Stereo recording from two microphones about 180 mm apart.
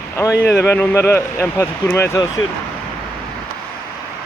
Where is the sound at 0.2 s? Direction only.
15° left (ahead or behind).